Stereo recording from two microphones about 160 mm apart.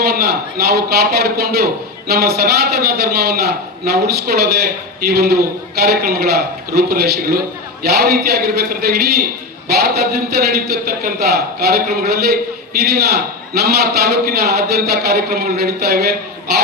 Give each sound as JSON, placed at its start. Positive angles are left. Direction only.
{"t": 0.0, "sound": "a man's voice", "side_deg": -75}